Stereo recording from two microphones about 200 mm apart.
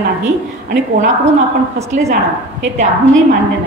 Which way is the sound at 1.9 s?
35° right (ahead or behind).